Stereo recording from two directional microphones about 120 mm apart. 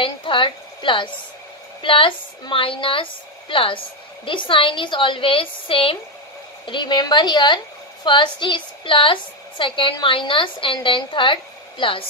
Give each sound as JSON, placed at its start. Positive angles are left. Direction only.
{"t": 0.0, "sound": "a woman's voice", "side_deg": 45}